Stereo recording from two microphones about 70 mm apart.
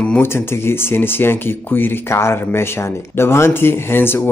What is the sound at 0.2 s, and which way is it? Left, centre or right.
Speech, left.